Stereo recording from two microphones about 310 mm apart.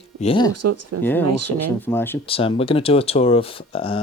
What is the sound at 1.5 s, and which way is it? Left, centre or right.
Speech, centre.